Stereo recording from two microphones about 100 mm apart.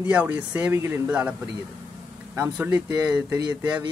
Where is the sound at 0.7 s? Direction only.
25° right (ahead or behind).